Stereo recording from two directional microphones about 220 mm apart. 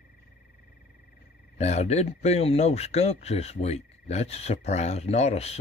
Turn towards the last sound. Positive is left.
turn(degrees=30)  # may be behind; listen again after turning